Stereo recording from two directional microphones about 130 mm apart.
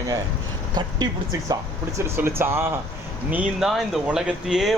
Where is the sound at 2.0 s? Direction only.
20° right (ahead or behind).